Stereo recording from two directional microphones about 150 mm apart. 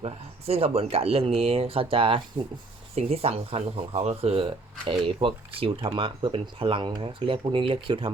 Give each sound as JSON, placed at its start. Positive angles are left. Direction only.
{"t": 0.0, "sound": "speech", "side_deg": -40}